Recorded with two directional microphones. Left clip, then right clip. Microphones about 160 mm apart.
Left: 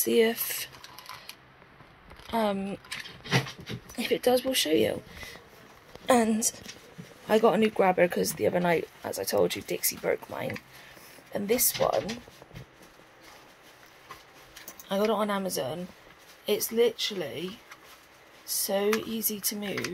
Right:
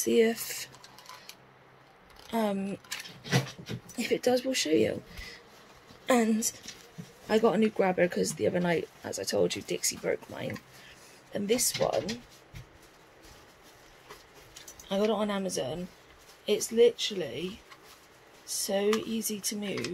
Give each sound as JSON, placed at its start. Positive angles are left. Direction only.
{"t": 0.0, "sound": "speech", "side_deg": -20}
{"t": 2.3, "sound": "speech", "side_deg": -10}
{"t": 4.0, "sound": "speech", "side_deg": -20}
{"t": 6.0, "sound": "speech", "side_deg": -5}
{"t": 14.9, "sound": "speech", "side_deg": 0}